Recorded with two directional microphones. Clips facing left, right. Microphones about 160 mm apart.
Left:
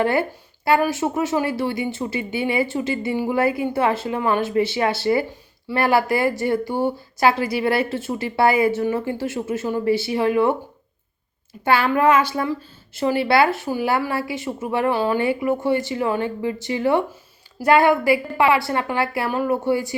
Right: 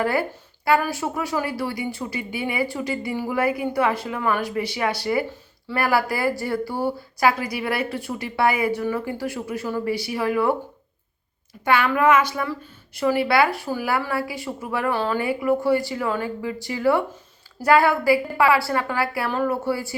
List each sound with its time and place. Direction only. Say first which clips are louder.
0.0 s a woman's voice: left 3 dB; 25° left (ahead or behind)
11.6 s a woman's voice: left 2 dB; 30° left (ahead or behind)